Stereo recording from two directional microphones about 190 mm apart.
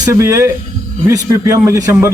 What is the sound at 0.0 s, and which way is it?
A man's voice, 15° right (ahead or behind).